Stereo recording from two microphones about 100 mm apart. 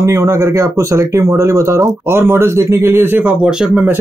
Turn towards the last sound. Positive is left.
turn(degrees=-10)  # may be behind; listen again after turning